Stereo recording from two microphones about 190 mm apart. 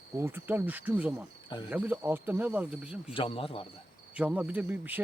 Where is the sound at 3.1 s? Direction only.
30° left (ahead or behind).